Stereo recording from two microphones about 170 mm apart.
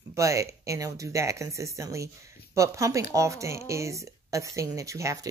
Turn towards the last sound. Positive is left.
turn(degrees=-20)  # may be behind; listen again after turning